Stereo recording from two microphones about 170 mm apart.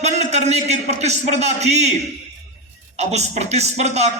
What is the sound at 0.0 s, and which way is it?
A man's voice, 40° right (ahead or behind).